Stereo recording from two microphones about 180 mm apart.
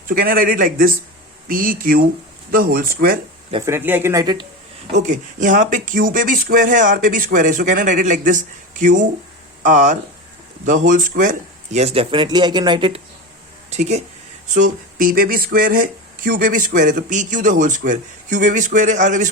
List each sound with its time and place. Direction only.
0.1 s speech: 55° right (ahead or behind)
3.7 s speech: 10° right (ahead or behind)
4.9 s speech: 45° right (ahead or behind); by 13.0 s 25° right (ahead or behind)
13.7 s speech: 40° right (ahead or behind)